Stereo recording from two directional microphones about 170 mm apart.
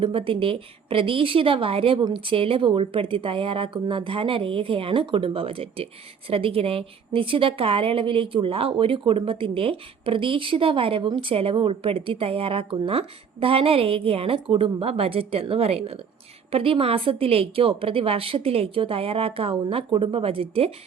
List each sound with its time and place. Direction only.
0.0 s a woman's voice: 30° right (ahead or behind)